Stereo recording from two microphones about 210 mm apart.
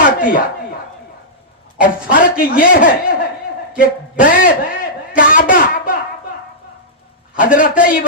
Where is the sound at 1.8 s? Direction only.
40° left (ahead or behind).